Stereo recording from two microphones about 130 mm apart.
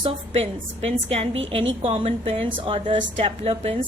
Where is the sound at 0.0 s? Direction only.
50° right (ahead or behind).